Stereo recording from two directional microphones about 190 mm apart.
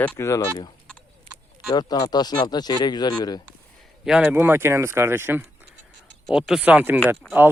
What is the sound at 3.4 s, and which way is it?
Speech, 5° right (ahead or behind).